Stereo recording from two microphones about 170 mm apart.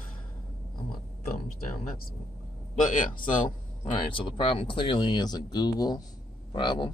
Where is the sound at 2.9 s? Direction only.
50° left (ahead or behind).